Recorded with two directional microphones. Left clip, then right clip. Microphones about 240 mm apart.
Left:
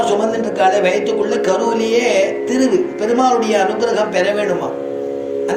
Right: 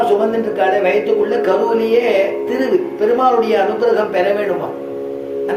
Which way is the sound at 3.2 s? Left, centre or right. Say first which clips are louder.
Left 1 dB; left.